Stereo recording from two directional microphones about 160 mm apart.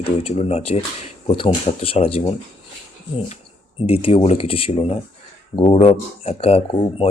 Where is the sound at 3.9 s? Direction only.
35° left (ahead or behind).